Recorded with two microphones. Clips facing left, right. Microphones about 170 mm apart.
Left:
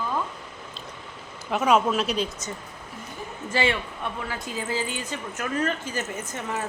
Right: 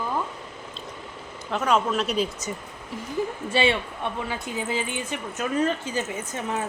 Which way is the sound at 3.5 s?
20° right (ahead or behind).